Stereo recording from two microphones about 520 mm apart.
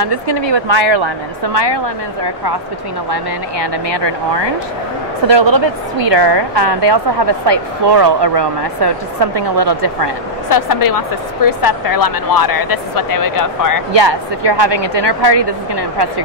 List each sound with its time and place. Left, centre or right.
0.0 s a woman's voice: right
3.1 s a woman's voice: right
10.5 s speech: left
13.9 s a woman's voice: right